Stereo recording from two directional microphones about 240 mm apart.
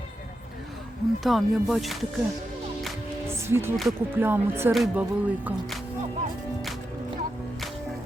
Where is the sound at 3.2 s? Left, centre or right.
Centre.